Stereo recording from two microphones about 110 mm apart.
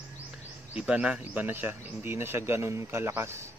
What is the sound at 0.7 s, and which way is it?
Speech, 10° right (ahead or behind).